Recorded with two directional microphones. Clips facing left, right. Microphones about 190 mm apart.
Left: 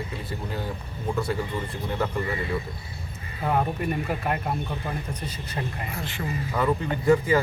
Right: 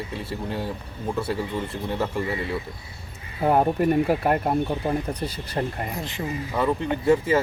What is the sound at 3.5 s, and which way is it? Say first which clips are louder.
Speech: right 6 dB; 45° right (ahead or behind).